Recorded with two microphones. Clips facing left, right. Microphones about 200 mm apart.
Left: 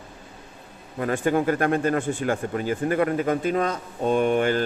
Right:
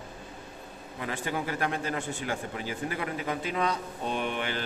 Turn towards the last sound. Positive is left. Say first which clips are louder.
# left 11 dB
turn(degrees=45)  # may be behind; listen again after turning